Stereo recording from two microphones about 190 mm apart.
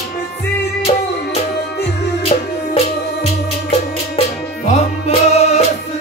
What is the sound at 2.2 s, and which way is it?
Music, 30° left (ahead or behind).